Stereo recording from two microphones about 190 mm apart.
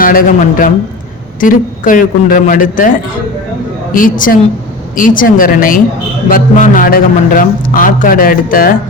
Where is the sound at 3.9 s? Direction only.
45° left (ahead or behind).